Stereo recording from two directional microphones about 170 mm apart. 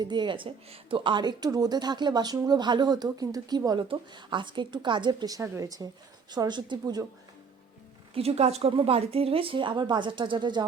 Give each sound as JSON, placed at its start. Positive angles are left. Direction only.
{"t": 0.0, "sound": "speech", "side_deg": -25}
{"t": 8.1, "sound": "a woman's voice", "side_deg": -35}